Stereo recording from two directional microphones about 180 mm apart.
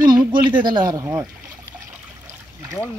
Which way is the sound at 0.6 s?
25° right (ahead or behind).